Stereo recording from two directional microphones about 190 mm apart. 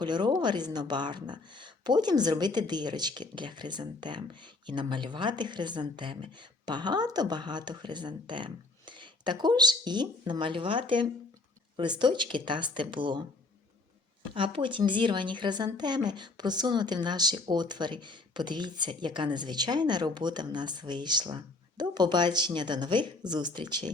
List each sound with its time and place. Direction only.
0.0 s speech: 25° right (ahead or behind)
14.3 s speech: 25° right (ahead or behind)